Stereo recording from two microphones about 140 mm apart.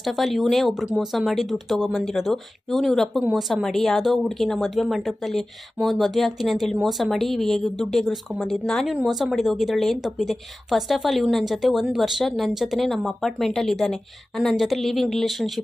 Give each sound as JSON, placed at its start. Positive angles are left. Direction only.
{"t": 0.0, "sound": "speech", "side_deg": 0}